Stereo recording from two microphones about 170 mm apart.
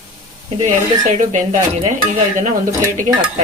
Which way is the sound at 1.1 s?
45° right (ahead or behind).